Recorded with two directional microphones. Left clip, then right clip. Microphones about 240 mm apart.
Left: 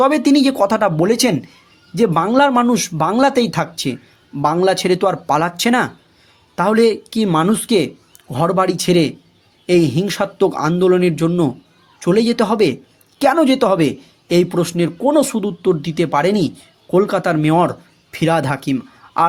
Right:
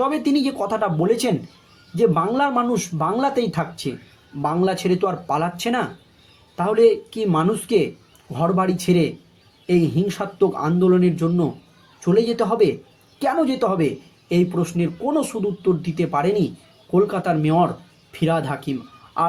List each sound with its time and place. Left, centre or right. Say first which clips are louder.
0.0 s speech: left 7 dB; left